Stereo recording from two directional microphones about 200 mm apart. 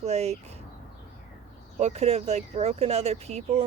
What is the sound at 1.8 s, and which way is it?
A woman's voice, 30° right (ahead or behind).